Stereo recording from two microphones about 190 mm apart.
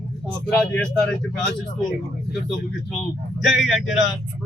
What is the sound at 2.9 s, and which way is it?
Speech, centre (ahead or behind).